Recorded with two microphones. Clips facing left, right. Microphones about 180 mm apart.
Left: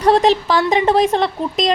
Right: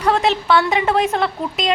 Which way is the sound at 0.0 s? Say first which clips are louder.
Left 4 dB; 35° left (ahead or behind).